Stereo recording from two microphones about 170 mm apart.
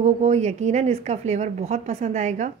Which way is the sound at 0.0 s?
40° right (ahead or behind).